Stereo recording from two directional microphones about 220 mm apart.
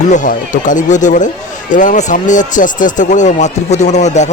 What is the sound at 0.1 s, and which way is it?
Speech, 35° left (ahead or behind).